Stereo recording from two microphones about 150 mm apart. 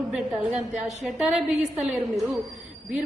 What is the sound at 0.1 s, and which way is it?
A woman's voice, 5° right (ahead or behind).